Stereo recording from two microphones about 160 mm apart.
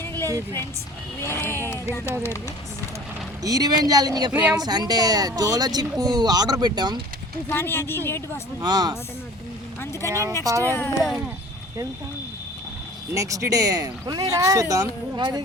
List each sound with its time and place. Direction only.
0.0 s a sound: 15° left (ahead or behind)
1.2 s vehicle: 15° left (ahead or behind)
1.9 s speech: 15° right (ahead or behind)
3.4 s speech: 25° right (ahead or behind)
4.3 s speech: 10° right (ahead or behind)
4.5 s speech: 25° right (ahead or behind)
7.5 s speech: 15° left (ahead or behind)
8.6 s speech: 25° right (ahead or behind)
10.1 s speech: 20° right (ahead or behind)
10.7 s speech: 15° left (ahead or behind)
13.1 s speech: 20° right (ahead or behind)